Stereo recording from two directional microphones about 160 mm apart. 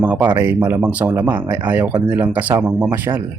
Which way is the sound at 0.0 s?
10° right (ahead or behind).